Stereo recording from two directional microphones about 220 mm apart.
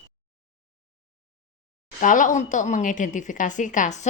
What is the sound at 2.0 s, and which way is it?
A woman's voice, 35° left (ahead or behind).